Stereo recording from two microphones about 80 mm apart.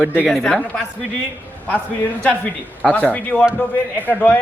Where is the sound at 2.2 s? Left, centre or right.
Centre.